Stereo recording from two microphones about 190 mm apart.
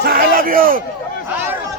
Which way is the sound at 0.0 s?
50° right (ahead or behind).